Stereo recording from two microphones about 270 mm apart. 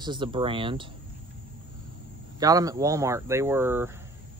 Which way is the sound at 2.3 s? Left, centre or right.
Centre.